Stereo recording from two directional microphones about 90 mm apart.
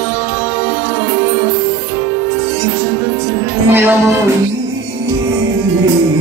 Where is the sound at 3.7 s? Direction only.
25° right (ahead or behind).